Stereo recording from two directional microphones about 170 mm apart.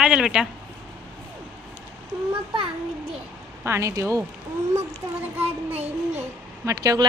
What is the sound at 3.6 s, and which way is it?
Speech, 15° right (ahead or behind).